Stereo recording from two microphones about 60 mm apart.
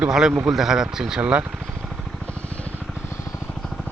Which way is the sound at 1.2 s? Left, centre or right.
Right.